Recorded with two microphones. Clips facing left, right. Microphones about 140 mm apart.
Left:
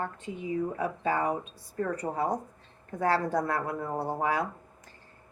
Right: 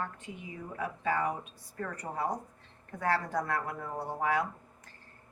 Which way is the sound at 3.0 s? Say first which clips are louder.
Left 4 dB; 30° left (ahead or behind).